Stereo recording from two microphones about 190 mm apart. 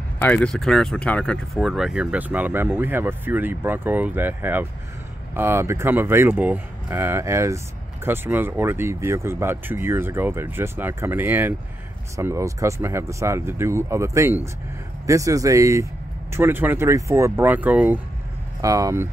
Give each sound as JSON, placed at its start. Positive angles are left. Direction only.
{"t": 0.2, "sound": "speech", "side_deg": 5}